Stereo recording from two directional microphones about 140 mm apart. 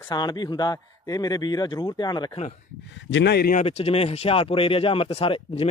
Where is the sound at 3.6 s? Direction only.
45° left (ahead or behind).